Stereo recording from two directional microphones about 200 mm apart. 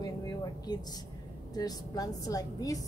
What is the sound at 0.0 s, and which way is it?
Vehicle, 20° left (ahead or behind).